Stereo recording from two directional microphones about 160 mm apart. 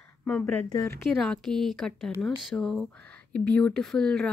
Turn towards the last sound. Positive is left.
turn(degrees=5)  # may be behind; listen again after turning